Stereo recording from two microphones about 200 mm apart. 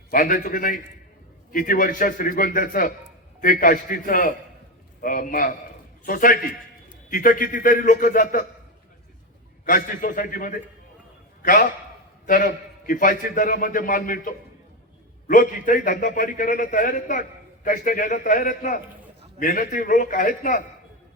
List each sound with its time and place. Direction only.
0.1 s a man's voice: 40° left (ahead or behind)
9.6 s a man's voice: 45° left (ahead or behind)
12.2 s a man's voice: 40° left (ahead or behind)
15.3 s a man's voice: 40° left (ahead or behind)